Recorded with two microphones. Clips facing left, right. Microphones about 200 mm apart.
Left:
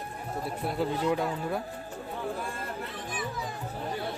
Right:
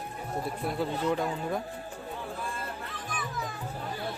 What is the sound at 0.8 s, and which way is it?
Speech, 5° left (ahead or behind).